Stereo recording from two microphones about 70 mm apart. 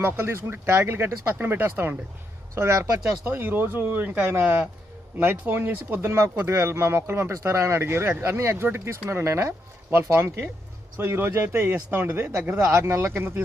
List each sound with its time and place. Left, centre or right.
0.0 s speech: right
12.5 s speech: right